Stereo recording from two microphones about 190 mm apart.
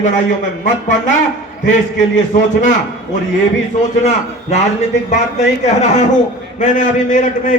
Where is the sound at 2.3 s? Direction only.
40° left (ahead or behind).